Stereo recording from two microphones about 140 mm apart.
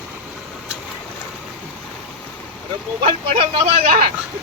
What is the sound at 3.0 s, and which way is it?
Speech, 40° right (ahead or behind).